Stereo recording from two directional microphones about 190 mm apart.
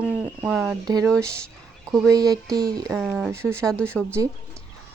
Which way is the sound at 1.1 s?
5° left (ahead or behind).